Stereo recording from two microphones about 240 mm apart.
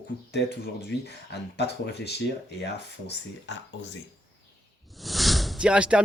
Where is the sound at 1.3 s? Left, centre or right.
Left.